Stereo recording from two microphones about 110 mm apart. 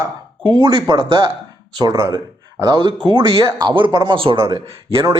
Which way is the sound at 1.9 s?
25° right (ahead or behind).